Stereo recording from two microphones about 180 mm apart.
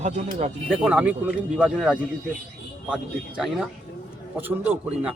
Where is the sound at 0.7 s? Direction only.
5° right (ahead or behind).